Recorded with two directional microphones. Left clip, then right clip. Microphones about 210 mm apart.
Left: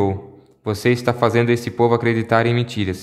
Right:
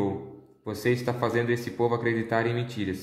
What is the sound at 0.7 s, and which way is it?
A man's voice, 40° left (ahead or behind).